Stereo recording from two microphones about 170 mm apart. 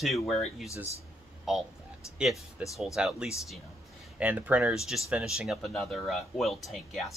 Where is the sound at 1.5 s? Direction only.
Centre (ahead or behind).